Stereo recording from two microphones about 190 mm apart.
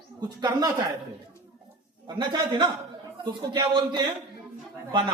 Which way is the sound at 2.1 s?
25° right (ahead or behind).